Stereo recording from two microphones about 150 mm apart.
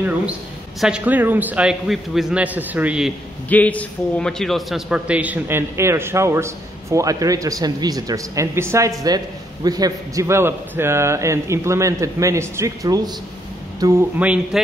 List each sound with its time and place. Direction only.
0.7 s a man's voice: 5° right (ahead or behind)
3.4 s a man's voice: 10° left (ahead or behind); by 13.1 s 25° right (ahead or behind)
14.1 s a man's voice: 10° right (ahead or behind)